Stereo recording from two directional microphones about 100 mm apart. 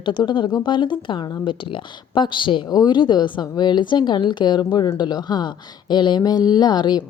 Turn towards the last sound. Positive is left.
turn(degrees=45)  # may be behind; listen again after turning